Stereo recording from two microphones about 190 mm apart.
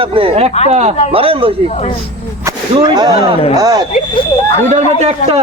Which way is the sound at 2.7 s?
20° right (ahead or behind).